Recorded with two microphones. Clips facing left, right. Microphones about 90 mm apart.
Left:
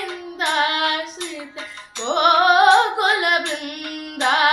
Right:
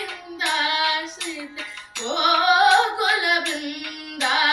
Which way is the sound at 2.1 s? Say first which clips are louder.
Left 4 dB; 50° left (ahead or behind).